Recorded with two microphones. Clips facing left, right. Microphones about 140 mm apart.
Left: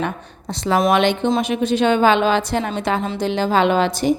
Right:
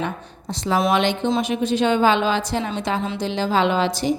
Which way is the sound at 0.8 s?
55° left (ahead or behind).